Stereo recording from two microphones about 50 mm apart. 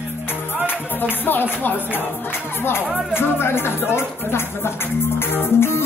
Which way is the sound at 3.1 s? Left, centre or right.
Left.